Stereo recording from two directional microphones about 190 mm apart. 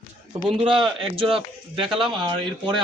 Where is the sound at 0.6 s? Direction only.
25° right (ahead or behind).